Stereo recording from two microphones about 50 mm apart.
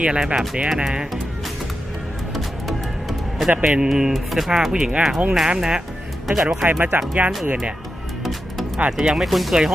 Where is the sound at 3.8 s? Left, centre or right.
Centre.